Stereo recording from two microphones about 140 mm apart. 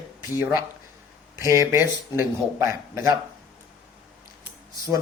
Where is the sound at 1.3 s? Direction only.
20° right (ahead or behind).